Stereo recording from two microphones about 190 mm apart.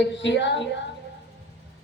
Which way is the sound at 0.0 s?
70° left (ahead or behind).